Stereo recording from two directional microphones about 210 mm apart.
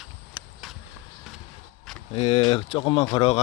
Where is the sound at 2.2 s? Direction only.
30° left (ahead or behind).